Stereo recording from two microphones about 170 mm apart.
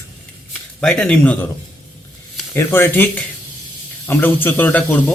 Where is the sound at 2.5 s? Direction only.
15° left (ahead or behind).